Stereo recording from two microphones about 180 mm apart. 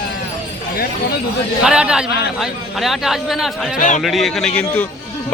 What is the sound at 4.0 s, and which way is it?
Speech, centre (ahead or behind).